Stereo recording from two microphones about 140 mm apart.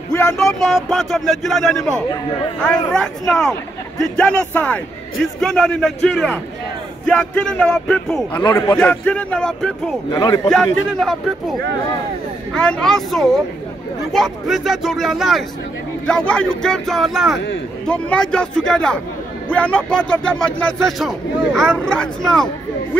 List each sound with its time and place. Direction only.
0.4 s speech: centre (ahead or behind)
10.1 s a man's voice: 25° left (ahead or behind)
10.5 s speech: 5° left (ahead or behind)
12.5 s speech: 5° left (ahead or behind)